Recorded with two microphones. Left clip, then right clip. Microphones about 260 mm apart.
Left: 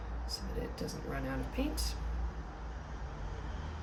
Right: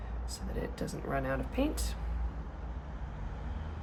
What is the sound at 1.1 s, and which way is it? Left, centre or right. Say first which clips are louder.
Speech: right 8 dB; centre.